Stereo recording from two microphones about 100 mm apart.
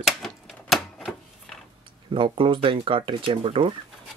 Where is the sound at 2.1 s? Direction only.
55° right (ahead or behind).